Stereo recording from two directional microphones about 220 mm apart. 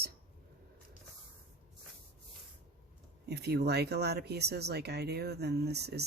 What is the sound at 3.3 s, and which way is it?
Speech, 50° right (ahead or behind).